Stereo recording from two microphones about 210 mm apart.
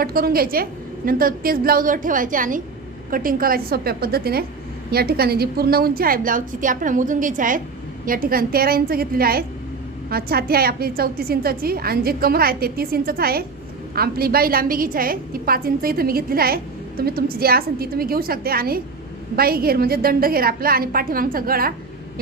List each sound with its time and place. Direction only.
0.0 s a woman's voice: 45° right (ahead or behind)